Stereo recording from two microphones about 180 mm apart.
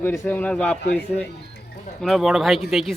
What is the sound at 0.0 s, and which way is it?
Speech, 10° left (ahead or behind).